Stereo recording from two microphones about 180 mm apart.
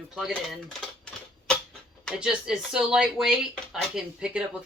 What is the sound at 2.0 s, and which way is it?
Speech, 5° right (ahead or behind).